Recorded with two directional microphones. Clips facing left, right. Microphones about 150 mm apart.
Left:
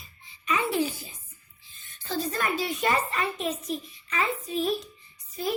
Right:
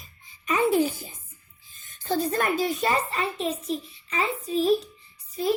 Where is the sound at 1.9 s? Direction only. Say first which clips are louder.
Right 5 dB; 50° right (ahead or behind).